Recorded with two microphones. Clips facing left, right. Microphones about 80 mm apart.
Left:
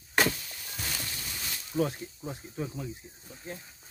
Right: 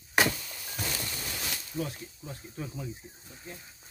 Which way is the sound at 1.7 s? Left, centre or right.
Left.